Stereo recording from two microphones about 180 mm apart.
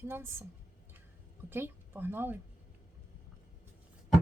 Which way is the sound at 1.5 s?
10° right (ahead or behind).